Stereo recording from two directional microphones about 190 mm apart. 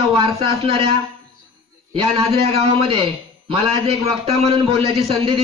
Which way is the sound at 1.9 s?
30° right (ahead or behind).